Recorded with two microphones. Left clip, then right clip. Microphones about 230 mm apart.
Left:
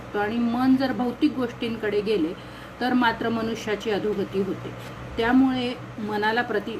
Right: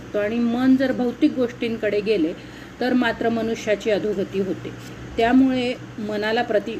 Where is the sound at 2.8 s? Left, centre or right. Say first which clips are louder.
Right 1 dB; left.